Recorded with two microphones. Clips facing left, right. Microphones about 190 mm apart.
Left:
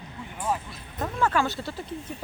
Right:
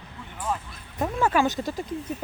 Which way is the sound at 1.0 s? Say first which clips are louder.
Right 3 dB; 15° right (ahead or behind).